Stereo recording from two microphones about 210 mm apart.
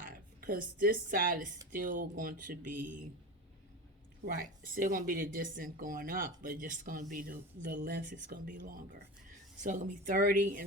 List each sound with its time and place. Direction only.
0.0 s speech: 45° right (ahead or behind)
4.3 s speech: 40° right (ahead or behind)